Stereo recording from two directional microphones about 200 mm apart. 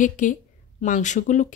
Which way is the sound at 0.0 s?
40° left (ahead or behind).